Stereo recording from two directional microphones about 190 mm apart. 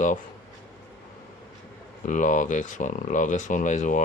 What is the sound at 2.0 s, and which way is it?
Speech, 40° left (ahead or behind).